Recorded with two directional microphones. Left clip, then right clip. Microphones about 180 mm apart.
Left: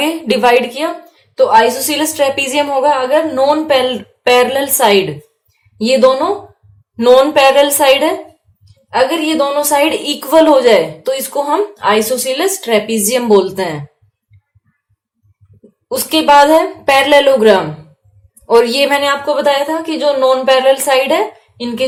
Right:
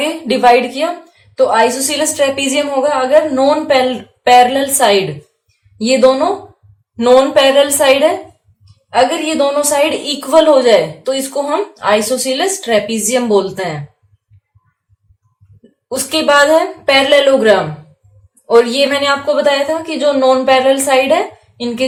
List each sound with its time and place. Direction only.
0.0 s a woman's voice: 35° left (ahead or behind)
16.0 s a woman's voice: 30° left (ahead or behind)